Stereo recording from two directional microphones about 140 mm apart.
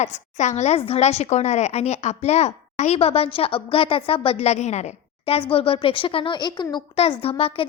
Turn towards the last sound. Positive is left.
turn(degrees=45)  # may be behind; listen again after turning